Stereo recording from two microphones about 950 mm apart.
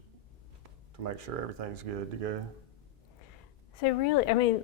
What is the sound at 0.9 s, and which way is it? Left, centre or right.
A man's voice, right.